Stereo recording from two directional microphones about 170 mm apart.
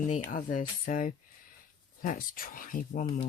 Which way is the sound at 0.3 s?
55° left (ahead or behind).